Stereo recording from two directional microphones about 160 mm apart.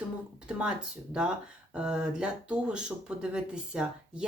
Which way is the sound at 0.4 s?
5° right (ahead or behind).